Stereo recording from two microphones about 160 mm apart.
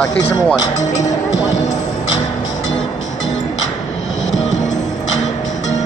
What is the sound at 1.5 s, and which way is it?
Music, 45° left (ahead or behind).